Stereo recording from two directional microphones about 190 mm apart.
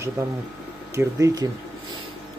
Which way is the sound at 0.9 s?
15° right (ahead or behind).